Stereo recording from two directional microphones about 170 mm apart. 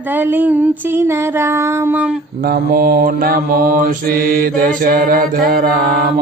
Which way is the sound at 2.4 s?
60° right (ahead or behind).